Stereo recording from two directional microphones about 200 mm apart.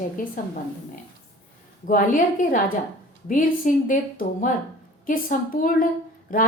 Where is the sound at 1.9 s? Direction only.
45° left (ahead or behind).